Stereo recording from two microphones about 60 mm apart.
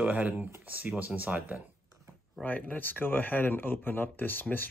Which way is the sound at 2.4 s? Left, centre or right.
Left.